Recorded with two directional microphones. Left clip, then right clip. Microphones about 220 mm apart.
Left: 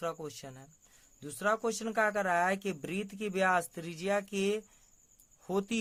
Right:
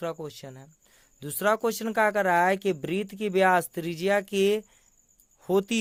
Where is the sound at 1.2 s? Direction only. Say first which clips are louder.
Right 7 dB; 40° right (ahead or behind).